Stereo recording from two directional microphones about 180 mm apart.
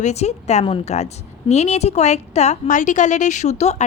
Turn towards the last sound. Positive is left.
turn(degrees=40)  # may be behind; listen again after turning